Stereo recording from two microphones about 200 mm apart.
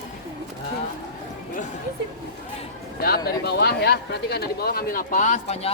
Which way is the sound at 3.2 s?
50° left (ahead or behind).